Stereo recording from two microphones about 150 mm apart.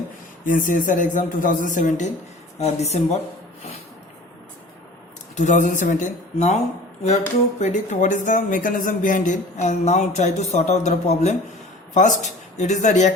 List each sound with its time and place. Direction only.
0.4 s speech: 60° left (ahead or behind)
2.6 s speech: 45° left (ahead or behind)
5.4 s speech: 55° left (ahead or behind)
7.6 s speech: 55° left (ahead or behind)